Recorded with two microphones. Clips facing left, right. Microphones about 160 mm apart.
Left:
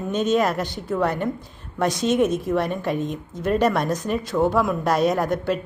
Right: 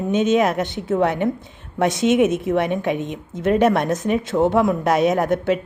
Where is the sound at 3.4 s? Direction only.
55° right (ahead or behind).